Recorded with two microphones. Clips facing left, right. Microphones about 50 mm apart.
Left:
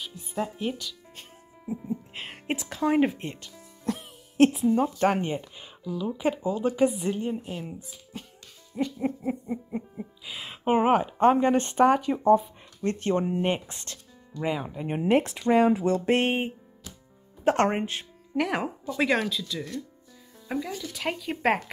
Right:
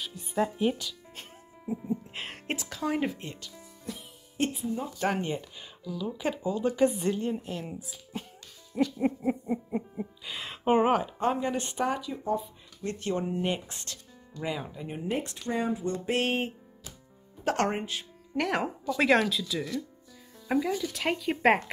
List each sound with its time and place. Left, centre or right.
0.3 s speech: centre
1.7 s music: centre
2.5 s speech: left
3.8 s music: left
4.8 s speech: left
8.9 s speech: centre; by 11.1 s left
11.1 s speech: left
12.8 s speech: left
15.0 s speech: left
16.1 s speech: left
18.3 s speech: centre